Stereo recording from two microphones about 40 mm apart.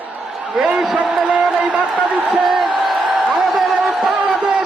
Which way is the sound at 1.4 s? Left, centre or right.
Right.